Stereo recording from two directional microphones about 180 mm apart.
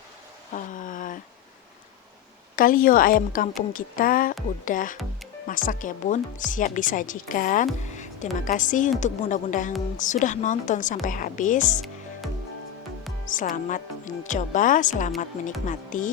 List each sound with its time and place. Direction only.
0.5 s a sound: 45° left (ahead or behind)
2.6 s a woman's voice: 50° left (ahead or behind)
13.2 s a woman's voice: 45° left (ahead or behind)